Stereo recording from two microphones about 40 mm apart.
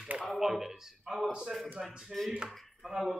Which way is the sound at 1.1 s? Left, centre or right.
Right.